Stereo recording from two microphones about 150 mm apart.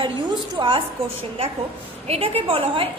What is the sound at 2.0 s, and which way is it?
Speech, 45° right (ahead or behind).